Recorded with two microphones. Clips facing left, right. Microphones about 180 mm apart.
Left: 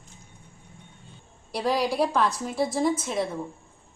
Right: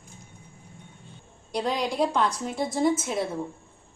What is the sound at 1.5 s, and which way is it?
A woman's voice, 5° left (ahead or behind).